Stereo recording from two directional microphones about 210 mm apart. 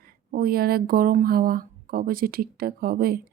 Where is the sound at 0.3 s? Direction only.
45° right (ahead or behind).